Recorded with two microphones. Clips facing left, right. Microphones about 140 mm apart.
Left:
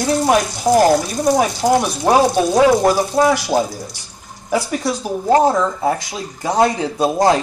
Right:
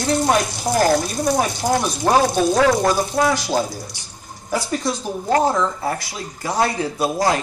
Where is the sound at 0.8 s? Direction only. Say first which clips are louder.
Left 1 dB; 20° left (ahead or behind).